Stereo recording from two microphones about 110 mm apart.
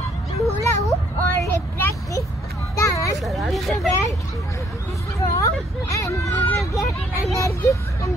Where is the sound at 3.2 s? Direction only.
Centre (ahead or behind).